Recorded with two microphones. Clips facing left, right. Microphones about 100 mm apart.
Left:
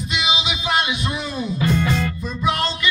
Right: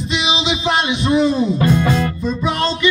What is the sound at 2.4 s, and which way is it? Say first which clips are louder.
Speech: right 3 dB; 25° right (ahead or behind).